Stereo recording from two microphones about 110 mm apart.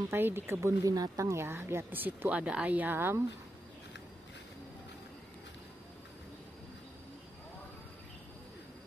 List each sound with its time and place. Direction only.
0.1 s a woman's voice: 20° right (ahead or behind)